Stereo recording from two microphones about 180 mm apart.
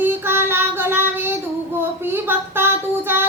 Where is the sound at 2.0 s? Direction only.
10° right (ahead or behind).